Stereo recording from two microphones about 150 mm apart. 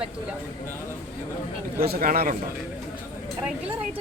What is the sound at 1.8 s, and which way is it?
Speech, 80° right.